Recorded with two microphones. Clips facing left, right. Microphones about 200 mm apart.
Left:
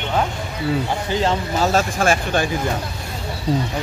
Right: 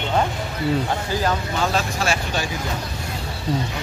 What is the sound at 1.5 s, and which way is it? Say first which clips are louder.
Speech: left 4 dB; 45° left (ahead or behind).